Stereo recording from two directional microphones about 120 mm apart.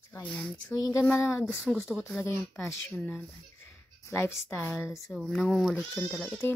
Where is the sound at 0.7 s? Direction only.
30° left (ahead or behind).